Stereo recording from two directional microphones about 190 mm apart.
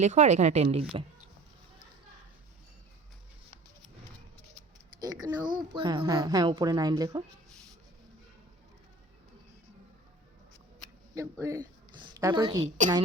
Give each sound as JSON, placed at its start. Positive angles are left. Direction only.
{"t": 0.0, "sound": "speech", "side_deg": -35}
{"t": 4.5, "sound": "a sound", "side_deg": -20}
{"t": 5.2, "sound": "speech", "side_deg": -25}
{"t": 11.1, "sound": "a woman's voice", "side_deg": -15}
{"t": 12.6, "sound": "speech", "side_deg": -40}